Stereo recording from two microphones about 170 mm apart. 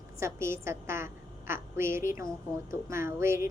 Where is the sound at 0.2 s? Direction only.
15° right (ahead or behind).